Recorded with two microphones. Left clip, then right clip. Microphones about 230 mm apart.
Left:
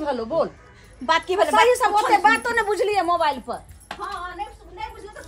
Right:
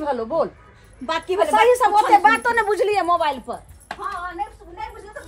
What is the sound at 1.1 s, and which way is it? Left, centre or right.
Speech, centre.